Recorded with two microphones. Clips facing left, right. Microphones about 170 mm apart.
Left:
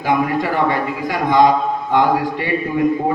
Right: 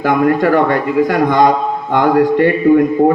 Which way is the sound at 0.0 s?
50° right (ahead or behind).